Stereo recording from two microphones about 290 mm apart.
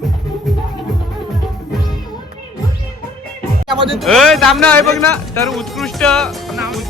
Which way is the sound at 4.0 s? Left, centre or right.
Centre.